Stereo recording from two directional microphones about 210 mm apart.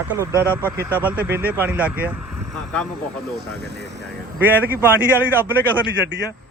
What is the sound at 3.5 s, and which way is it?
Speech, 50° right (ahead or behind).